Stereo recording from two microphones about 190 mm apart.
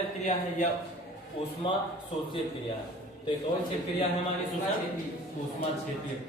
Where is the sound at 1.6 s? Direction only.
25° left (ahead or behind).